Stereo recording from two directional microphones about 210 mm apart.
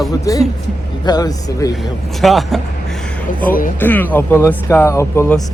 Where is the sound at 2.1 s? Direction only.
Centre (ahead or behind).